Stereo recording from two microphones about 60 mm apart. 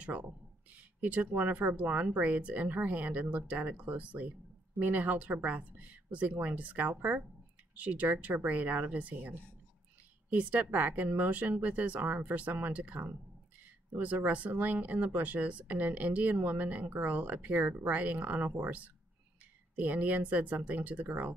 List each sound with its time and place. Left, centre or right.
0.0 s speech: right
19.8 s speech: right